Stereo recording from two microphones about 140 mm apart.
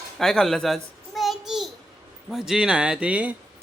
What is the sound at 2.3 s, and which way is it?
Speech, centre (ahead or behind).